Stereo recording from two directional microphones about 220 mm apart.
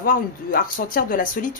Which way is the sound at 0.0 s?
40° left (ahead or behind).